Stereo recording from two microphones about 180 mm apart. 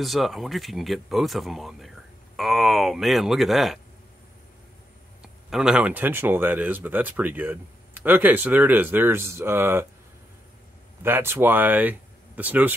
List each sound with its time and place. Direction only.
0.0 s speech: centre (ahead or behind)
5.2 s speech: 5° right (ahead or behind)
11.0 s speech: 10° right (ahead or behind)